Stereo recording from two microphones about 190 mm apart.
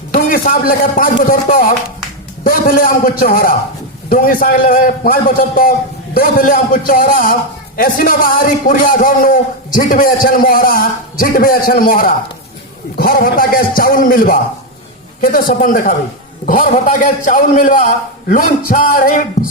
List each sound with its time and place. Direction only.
0.1 s a man's voice: 45° left (ahead or behind)